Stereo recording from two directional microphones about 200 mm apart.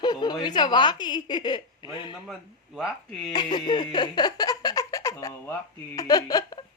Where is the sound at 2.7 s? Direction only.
Centre (ahead or behind).